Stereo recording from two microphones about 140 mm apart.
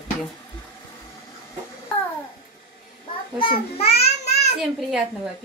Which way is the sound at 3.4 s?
45° left (ahead or behind).